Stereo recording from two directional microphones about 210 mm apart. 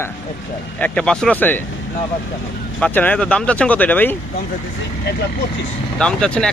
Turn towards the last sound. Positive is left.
turn(degrees=5)  # may be behind; listen again after turning